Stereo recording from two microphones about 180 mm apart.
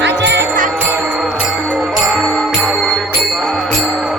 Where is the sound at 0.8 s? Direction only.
10° right (ahead or behind).